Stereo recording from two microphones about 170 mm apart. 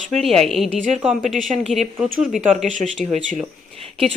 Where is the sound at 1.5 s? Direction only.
40° right (ahead or behind).